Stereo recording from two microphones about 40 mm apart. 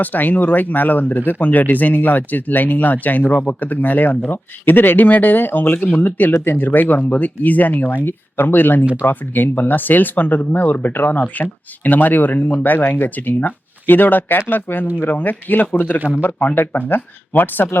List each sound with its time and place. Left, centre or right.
0.0 s speech: left
4.3 s speech: left
8.0 s speech: left
12.4 s speech: left
12.6 s speech: left